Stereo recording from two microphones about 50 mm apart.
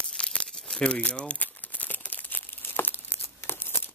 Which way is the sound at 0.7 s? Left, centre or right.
Centre.